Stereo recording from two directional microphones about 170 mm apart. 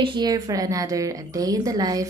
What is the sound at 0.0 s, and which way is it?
A woman's voice, 25° right (ahead or behind).